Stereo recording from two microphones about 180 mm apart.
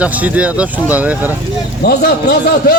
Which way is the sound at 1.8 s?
55° left (ahead or behind).